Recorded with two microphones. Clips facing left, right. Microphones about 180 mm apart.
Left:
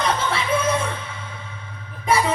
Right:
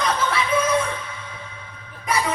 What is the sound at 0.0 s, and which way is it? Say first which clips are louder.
Music: even; 30° left (ahead or behind).